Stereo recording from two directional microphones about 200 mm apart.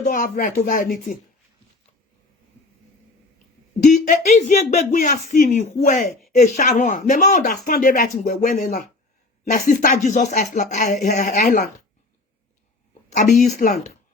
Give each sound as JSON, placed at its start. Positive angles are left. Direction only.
{"t": 0.0, "sound": "speech", "side_deg": 40}
{"t": 3.8, "sound": "speech", "side_deg": 40}
{"t": 12.9, "sound": "speech", "side_deg": 35}